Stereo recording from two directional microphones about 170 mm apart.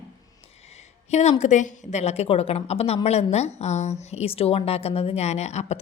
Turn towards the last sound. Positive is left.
turn(degrees=40)  # may be behind; listen again after turning